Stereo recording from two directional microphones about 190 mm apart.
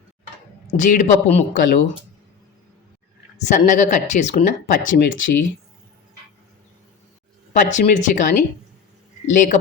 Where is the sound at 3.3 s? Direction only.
35° left (ahead or behind).